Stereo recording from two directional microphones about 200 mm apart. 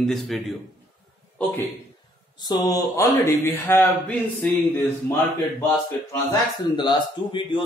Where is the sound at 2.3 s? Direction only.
20° left (ahead or behind).